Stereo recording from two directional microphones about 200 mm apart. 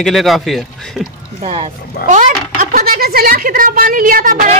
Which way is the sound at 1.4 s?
30° right (ahead or behind).